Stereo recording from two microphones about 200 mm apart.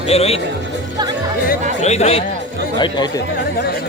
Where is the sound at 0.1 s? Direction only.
30° left (ahead or behind).